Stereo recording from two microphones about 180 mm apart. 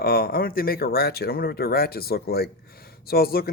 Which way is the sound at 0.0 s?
60° left (ahead or behind).